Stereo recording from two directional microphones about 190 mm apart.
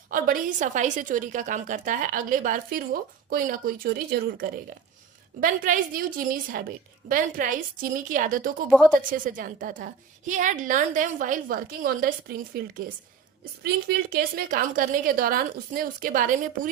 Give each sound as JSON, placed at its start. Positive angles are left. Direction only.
{"t": 0.1, "sound": "a woman's voice", "side_deg": -45}